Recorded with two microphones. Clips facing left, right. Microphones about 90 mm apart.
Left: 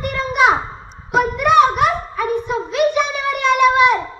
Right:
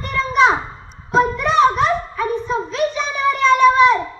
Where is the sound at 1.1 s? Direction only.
60° left (ahead or behind).